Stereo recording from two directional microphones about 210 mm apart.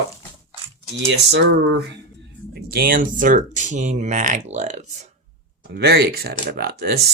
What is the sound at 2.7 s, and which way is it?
Speech, 45° right (ahead or behind).